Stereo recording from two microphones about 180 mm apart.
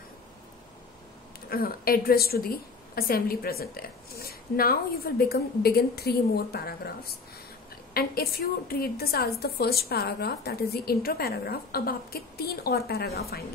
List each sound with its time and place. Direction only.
1.5 s a woman's voice: 55° left (ahead or behind)